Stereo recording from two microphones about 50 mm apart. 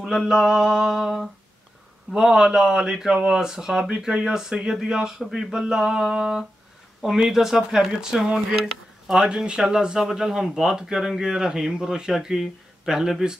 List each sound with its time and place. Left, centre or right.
0.0 s speech: centre